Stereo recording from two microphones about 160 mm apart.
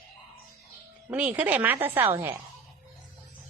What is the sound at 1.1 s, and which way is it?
Speech, 10° right (ahead or behind).